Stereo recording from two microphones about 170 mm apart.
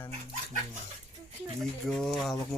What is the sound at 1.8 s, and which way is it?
Speech, centre (ahead or behind).